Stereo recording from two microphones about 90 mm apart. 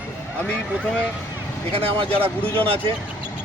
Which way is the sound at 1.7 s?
90° right.